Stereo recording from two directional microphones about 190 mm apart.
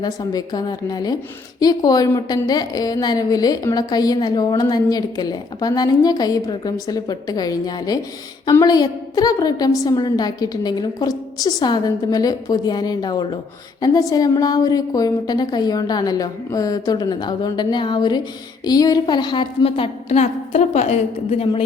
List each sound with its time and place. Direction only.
0.0 s a woman's voice: 20° left (ahead or behind)